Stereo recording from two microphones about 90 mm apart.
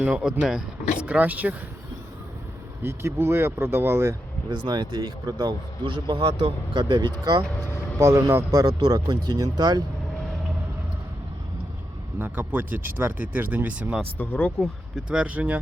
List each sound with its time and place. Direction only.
0.0 s speech: 10° right (ahead or behind)
1.0 s speech: 15° right (ahead or behind)
2.8 s speech: 30° right (ahead or behind)
4.4 s speech: 55° right (ahead or behind)
5.8 s speech: 65° right (ahead or behind); by 7.4 s 45° right (ahead or behind)
7.9 s a man's voice: 35° right (ahead or behind)
8.4 s speech: 45° right (ahead or behind)
12.2 s speech: 20° right (ahead or behind)
14.0 s speech: 15° left (ahead or behind)
14.6 s speech: 10° right (ahead or behind)